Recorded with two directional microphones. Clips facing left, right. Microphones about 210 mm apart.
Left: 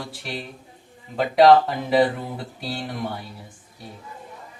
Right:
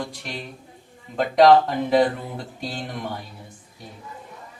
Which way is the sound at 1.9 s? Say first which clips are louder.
Left 1 dB; 5° left (ahead or behind).